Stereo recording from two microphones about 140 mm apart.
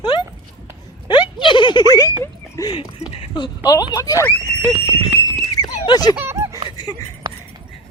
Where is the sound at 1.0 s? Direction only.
30° left (ahead or behind).